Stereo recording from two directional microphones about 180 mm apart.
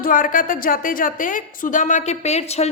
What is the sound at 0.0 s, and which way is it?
A woman's voice, 50° left (ahead or behind).